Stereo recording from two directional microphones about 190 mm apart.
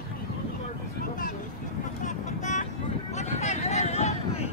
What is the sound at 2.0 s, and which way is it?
Vehicle, 40° left (ahead or behind).